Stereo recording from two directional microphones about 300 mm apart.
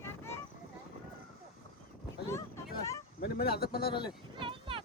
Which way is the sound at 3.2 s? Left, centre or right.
Left.